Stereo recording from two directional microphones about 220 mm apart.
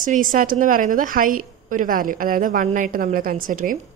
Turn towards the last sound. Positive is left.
turn(degrees=-40)  # may be behind; listen again after turning